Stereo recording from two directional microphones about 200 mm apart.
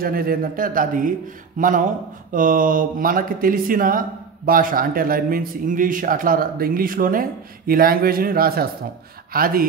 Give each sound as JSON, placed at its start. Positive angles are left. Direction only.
{"t": 0.0, "sound": "a man's voice", "side_deg": -45}